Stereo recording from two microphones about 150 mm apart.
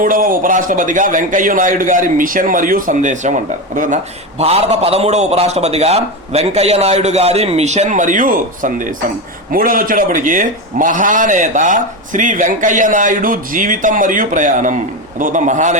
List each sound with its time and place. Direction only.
0.0 s a man's voice: 65° right (ahead or behind)